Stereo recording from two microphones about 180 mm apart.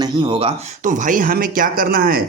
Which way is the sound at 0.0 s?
25° right (ahead or behind).